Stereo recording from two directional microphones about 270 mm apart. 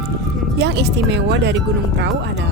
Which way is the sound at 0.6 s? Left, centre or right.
Right.